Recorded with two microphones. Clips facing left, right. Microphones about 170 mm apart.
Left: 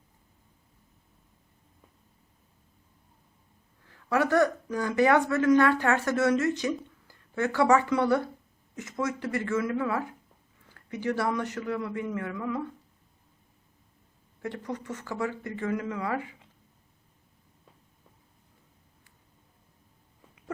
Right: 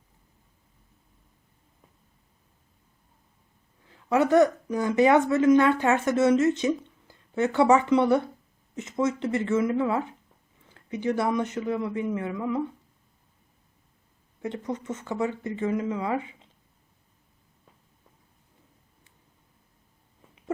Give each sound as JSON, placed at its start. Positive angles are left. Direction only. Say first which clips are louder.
{"t": 3.8, "sound": "speech", "louder": "right 4 dB", "side_deg": -20}
{"t": 14.4, "sound": "speech", "louder": "right 3 dB", "side_deg": -20}